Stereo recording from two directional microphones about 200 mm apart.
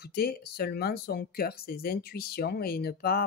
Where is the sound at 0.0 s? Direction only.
50° left (ahead or behind).